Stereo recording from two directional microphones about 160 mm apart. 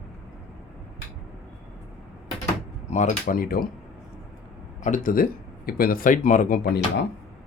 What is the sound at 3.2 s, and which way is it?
Speech, 65° left (ahead or behind).